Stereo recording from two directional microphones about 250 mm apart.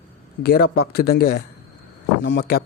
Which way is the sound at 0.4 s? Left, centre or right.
Left.